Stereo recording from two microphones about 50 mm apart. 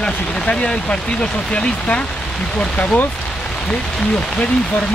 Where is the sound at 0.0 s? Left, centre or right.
Centre.